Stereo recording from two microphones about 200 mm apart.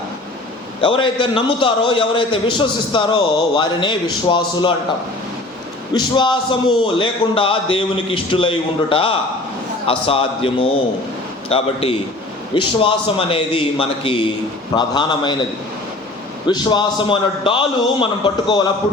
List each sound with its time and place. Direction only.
0.8 s a man's voice: 25° left (ahead or behind)
5.9 s a man's voice: 25° left (ahead or behind)
16.5 s a man's voice: 20° left (ahead or behind)